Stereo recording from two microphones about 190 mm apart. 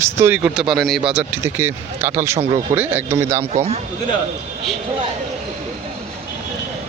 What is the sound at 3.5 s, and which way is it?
Speech, 35° right (ahead or behind).